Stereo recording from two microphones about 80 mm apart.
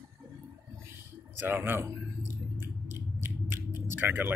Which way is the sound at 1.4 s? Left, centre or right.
Right.